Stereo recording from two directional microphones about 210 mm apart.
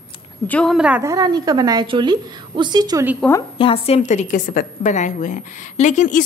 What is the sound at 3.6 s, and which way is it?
A woman's voice, 30° left (ahead or behind).